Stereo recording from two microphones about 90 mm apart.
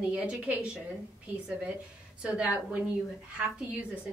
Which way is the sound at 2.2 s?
15° right (ahead or behind).